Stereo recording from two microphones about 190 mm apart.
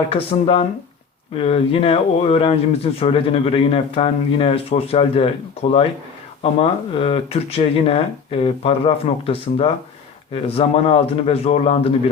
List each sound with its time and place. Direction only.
0.1 s speech: 30° left (ahead or behind)
6.4 s speech: 30° left (ahead or behind)